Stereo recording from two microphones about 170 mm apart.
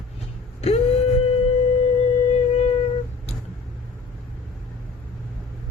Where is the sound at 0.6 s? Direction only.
35° left (ahead or behind).